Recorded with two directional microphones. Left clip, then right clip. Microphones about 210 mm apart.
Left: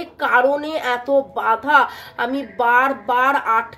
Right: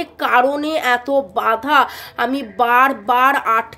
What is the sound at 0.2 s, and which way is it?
Speech, 30° right (ahead or behind).